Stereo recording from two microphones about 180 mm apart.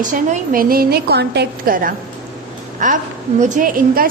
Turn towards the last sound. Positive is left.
turn(degrees=-45)  # may be behind; listen again after turning